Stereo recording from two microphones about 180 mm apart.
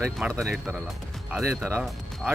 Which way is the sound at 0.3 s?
15° right (ahead or behind).